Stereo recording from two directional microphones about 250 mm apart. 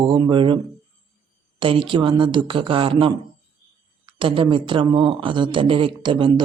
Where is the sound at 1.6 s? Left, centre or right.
Right.